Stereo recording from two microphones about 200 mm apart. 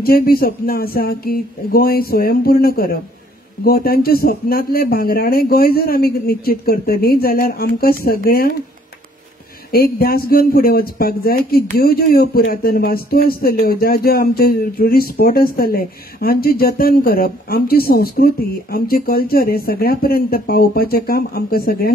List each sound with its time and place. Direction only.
0.0 s a man's voice: 50° left (ahead or behind)
9.7 s a man's voice: 50° left (ahead or behind)